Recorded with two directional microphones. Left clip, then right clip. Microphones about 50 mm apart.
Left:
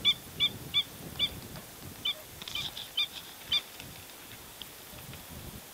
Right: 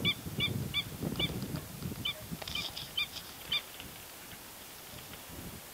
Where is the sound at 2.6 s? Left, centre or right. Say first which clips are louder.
Left 2 dB; centre.